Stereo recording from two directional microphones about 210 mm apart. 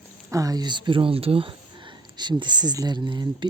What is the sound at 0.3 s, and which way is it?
Speech, 15° right (ahead or behind).